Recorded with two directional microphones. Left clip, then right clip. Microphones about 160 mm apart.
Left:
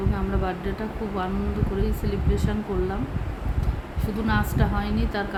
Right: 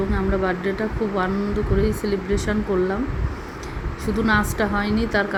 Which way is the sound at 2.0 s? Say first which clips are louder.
Right 5 dB; 20° right (ahead or behind).